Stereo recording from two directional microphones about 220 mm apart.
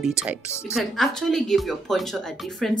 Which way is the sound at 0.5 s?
10° left (ahead or behind).